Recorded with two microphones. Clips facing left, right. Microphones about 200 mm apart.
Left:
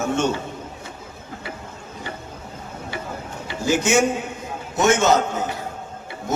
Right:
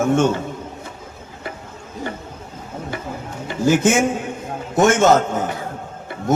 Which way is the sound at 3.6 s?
50° right (ahead or behind).